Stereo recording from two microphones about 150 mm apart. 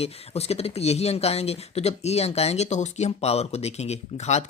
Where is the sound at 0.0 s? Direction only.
45° left (ahead or behind).